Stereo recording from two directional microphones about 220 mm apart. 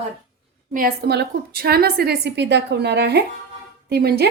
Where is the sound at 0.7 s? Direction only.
45° right (ahead or behind).